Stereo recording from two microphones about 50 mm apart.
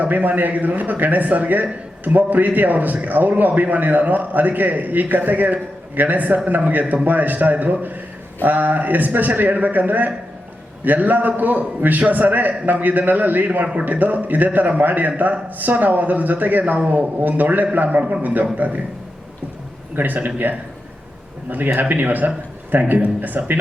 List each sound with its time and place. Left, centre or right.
0.0 s speech: right
20.0 s speech: right